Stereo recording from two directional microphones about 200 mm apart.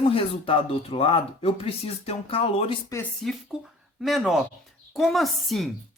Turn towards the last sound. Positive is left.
turn(degrees=0)  # may be behind; listen again after turning